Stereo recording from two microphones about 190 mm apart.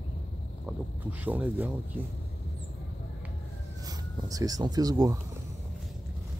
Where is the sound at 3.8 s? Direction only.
20° right (ahead or behind).